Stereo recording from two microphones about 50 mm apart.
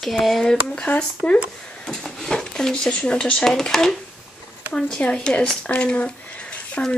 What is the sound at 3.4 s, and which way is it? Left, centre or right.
Speech, centre.